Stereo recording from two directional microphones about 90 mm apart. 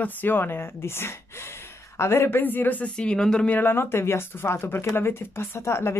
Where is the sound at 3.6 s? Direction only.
25° left (ahead or behind).